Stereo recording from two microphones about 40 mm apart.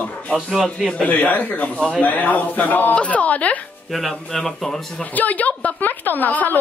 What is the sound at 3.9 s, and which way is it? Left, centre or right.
Speech, centre.